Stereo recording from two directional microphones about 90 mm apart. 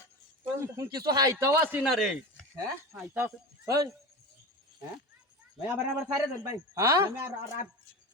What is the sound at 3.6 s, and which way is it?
Speech, 45° right (ahead or behind).